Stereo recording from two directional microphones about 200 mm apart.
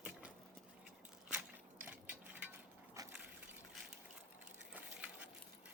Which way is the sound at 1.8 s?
10° right (ahead or behind).